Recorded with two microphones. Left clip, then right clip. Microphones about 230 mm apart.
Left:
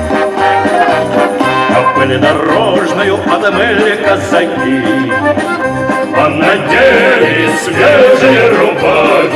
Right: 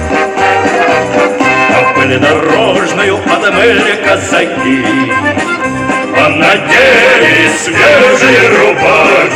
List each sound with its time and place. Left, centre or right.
0.4 s music: right
6.1 s music: right; by 9.2 s centre